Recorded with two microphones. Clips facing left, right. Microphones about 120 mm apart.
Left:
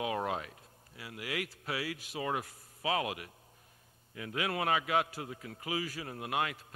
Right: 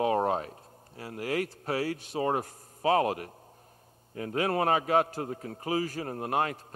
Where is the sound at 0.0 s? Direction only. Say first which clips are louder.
Right 8 dB; 40° right (ahead or behind).